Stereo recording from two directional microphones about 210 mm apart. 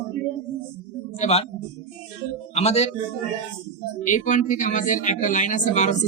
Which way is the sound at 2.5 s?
30° left (ahead or behind).